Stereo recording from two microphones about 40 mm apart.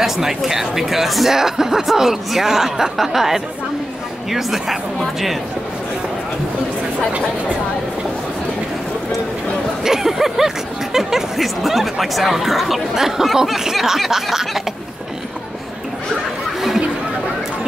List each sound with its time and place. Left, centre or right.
0.0 s speech: centre
7.1 s speech: right
9.8 s speech: centre